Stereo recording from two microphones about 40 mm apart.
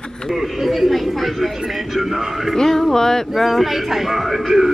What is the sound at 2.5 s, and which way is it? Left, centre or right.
Speech, centre.